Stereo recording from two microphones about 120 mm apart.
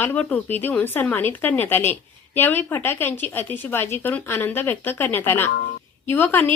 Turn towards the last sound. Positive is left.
turn(degrees=20)  # may be behind; listen again after turning